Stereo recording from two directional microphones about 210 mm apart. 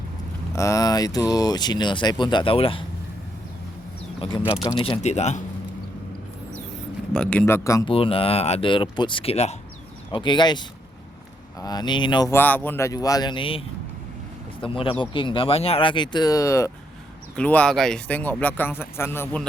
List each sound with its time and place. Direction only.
0.5 s speech: 15° left (ahead or behind)
4.6 s speech: 20° left (ahead or behind)
7.1 s speech: 5° left (ahead or behind)
7.9 s speech: 25° left (ahead or behind); by 19.5 s 10° left (ahead or behind)